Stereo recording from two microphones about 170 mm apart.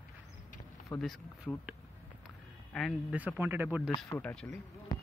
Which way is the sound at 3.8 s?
15° left (ahead or behind).